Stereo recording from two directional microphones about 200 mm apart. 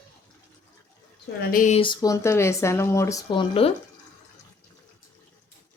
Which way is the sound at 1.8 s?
20° left (ahead or behind).